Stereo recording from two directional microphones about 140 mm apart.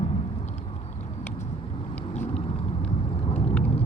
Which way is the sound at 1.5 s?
40° left (ahead or behind).